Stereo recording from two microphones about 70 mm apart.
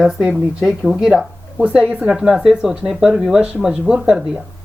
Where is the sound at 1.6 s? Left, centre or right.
Centre.